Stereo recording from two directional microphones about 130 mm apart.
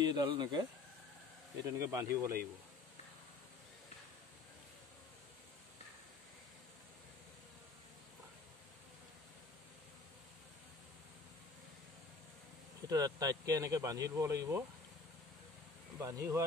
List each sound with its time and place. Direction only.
0.0 s speech: 35° right (ahead or behind)
1.7 s speech: 25° right (ahead or behind)
12.8 s speech: 30° right (ahead or behind)
16.0 s speech: 25° right (ahead or behind)